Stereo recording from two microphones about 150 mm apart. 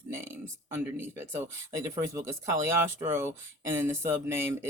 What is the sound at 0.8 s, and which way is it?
Speech, 15° right (ahead or behind).